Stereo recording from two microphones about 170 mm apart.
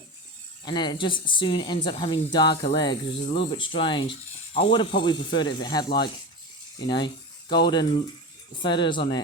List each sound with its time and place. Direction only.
0.6 s speech: 25° left (ahead or behind)